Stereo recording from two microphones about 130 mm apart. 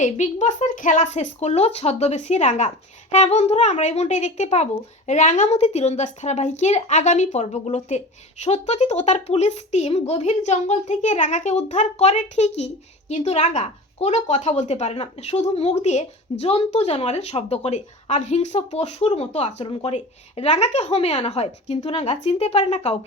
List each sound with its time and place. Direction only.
0.0 s a woman's voice: 65° left (ahead or behind)